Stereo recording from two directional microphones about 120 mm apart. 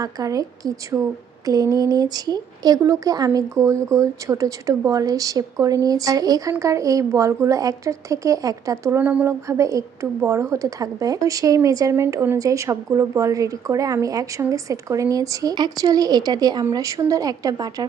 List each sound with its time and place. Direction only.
0.0 s speech: 30° right (ahead or behind)